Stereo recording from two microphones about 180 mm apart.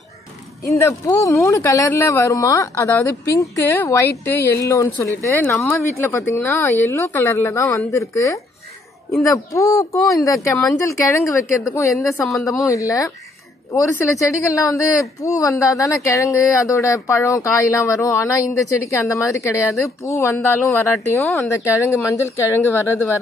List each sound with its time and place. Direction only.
0.7 s speech: 20° left (ahead or behind)